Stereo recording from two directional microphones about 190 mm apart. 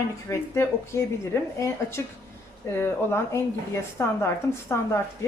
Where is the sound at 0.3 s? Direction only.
15° left (ahead or behind).